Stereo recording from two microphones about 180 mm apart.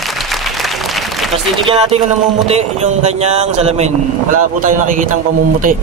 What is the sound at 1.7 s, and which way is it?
A man's voice, 35° right (ahead or behind).